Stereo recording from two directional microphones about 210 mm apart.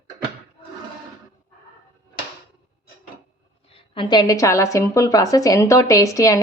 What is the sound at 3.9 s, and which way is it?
A woman's voice, 20° left (ahead or behind).